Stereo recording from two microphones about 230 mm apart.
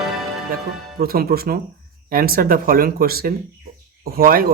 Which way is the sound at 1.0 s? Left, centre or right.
Right.